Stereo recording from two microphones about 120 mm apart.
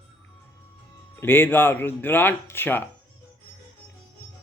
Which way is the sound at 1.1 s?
20° left (ahead or behind).